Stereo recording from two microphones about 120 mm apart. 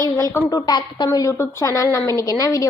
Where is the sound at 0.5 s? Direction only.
35° left (ahead or behind).